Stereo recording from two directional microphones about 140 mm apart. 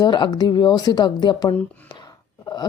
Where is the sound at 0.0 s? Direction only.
30° left (ahead or behind).